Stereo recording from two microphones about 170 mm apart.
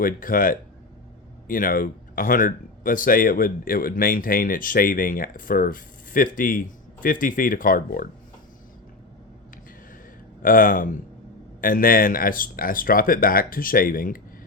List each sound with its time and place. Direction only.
0.0 s speech: 55° left (ahead or behind)
10.4 s speech: 55° left (ahead or behind)